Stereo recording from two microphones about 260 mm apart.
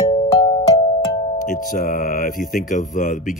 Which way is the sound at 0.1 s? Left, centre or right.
Centre.